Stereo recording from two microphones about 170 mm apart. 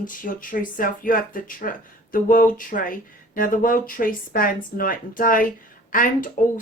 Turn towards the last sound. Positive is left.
turn(degrees=55)  # may be behind; listen again after turning